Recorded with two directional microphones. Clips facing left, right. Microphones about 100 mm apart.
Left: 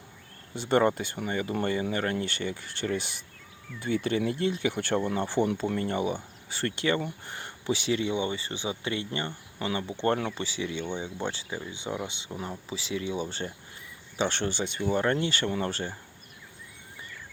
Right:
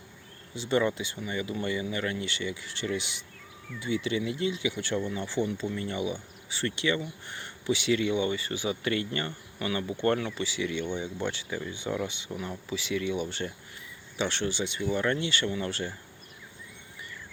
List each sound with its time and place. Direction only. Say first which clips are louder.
0.5 s speech: left 3 dB; 50° left (ahead or behind); by 10.2 s 25° left (ahead or behind)
10.2 s speech: even; 40° left (ahead or behind)